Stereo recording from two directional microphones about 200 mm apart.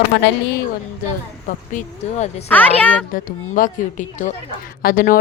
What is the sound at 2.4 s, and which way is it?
Speech, 5° left (ahead or behind).